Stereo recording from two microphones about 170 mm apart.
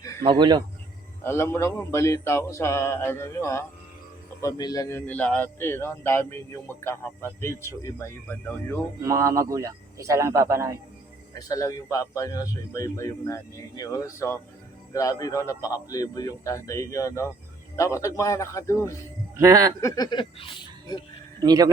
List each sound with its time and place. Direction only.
0.2 s speech: 25° right (ahead or behind)
1.2 s speech: 15° left (ahead or behind)
9.0 s speech: 20° right (ahead or behind)
11.3 s speech: 20° left (ahead or behind)
19.4 s speech: 20° right (ahead or behind)
19.8 s speech: 25° left (ahead or behind)
21.4 s speech: 20° right (ahead or behind)